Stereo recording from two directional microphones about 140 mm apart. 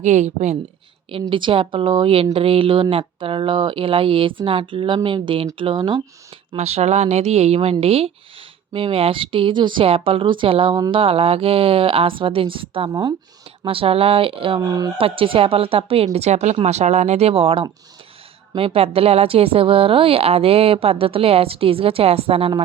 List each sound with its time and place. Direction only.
0.0 s speech: 55° right (ahead or behind)
1.3 s speech: 35° right (ahead or behind)
6.5 s a woman's voice: 45° right (ahead or behind)
10.8 s speech: 30° right (ahead or behind)
11.0 s speech: 40° right (ahead or behind)
12.9 s speech: 30° right (ahead or behind)
13.7 s speech: 40° right (ahead or behind)
14.6 s speech: 25° right (ahead or behind)
14.9 s a woman's voice: 40° right (ahead or behind)